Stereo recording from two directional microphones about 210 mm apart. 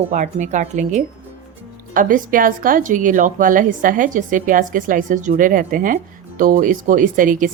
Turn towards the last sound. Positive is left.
turn(degrees=-40)  # may be behind; listen again after turning